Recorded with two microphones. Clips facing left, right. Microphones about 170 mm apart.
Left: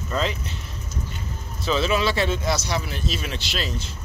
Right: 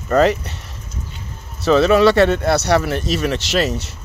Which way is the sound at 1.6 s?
65° right (ahead or behind).